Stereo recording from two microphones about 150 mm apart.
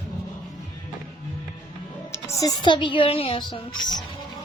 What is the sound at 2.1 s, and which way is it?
Speech, 20° left (ahead or behind).